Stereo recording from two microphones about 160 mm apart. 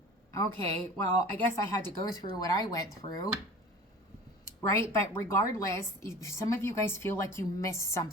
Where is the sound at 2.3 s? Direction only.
25° left (ahead or behind).